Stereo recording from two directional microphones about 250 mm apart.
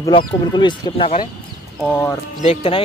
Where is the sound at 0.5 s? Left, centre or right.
Centre.